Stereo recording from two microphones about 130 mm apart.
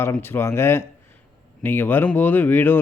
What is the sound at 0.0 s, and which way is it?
Speech, 20° left (ahead or behind).